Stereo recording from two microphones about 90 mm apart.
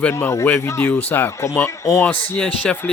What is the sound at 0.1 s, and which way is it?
Speech, 30° left (ahead or behind).